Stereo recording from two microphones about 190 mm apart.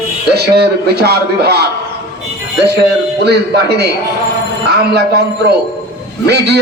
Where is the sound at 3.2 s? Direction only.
60° right (ahead or behind).